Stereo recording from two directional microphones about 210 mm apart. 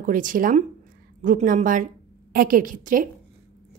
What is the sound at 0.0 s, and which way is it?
A woman's voice, 40° right (ahead or behind).